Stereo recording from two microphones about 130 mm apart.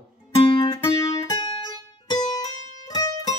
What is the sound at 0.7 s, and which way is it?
Music, 25° left (ahead or behind).